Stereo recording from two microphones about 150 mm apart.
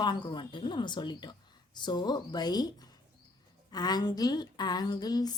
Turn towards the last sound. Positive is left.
turn(degrees=25)  # may be behind; listen again after turning